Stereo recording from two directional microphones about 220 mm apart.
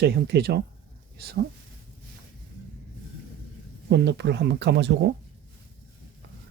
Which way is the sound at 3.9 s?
50° right (ahead or behind).